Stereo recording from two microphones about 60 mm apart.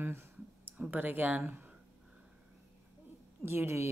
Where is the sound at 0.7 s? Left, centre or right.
Right.